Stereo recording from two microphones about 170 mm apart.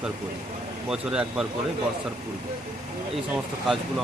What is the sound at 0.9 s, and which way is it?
Speech, 5° right (ahead or behind).